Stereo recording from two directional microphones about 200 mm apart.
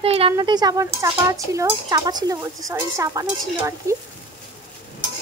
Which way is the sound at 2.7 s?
15° right (ahead or behind).